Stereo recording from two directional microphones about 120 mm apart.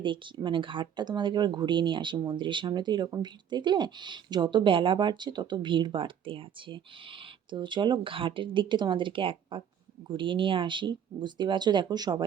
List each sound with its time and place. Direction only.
0.0 s speech: 40° right (ahead or behind)